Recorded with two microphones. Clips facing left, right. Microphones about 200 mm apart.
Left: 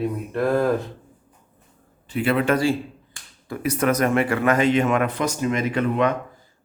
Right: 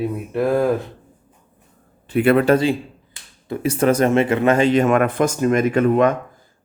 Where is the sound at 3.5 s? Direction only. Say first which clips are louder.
Right 4 dB; 25° right (ahead or behind); by 6.1 s 45° right (ahead or behind).